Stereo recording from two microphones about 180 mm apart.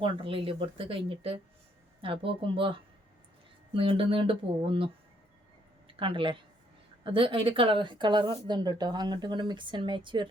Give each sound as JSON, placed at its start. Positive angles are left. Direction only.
{"t": 0.0, "sound": "a woman's voice", "side_deg": -30}
{"t": 6.0, "sound": "a woman's voice", "side_deg": -30}